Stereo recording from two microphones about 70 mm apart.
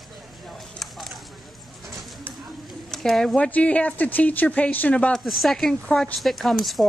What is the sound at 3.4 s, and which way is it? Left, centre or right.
Speech, centre.